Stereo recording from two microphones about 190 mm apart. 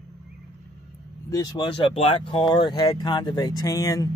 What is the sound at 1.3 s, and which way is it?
Speech, 20° left (ahead or behind).